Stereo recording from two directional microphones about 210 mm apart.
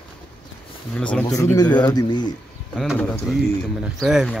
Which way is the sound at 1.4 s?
15° left (ahead or behind).